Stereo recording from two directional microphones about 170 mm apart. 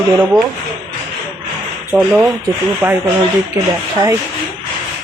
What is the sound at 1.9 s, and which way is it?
Speech, 5° right (ahead or behind).